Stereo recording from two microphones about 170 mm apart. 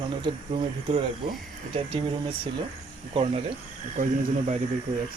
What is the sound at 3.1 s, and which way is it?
Speech, 35° right (ahead or behind).